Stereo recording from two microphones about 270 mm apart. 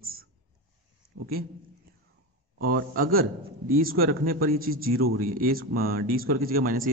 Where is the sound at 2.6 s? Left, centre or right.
Right.